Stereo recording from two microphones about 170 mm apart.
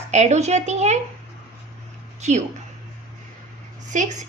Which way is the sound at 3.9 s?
50° right (ahead or behind).